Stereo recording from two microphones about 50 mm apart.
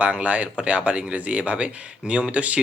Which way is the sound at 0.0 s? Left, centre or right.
Right.